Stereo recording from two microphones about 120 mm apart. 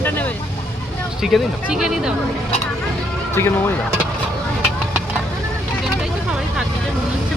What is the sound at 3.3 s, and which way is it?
Speech, 20° left (ahead or behind).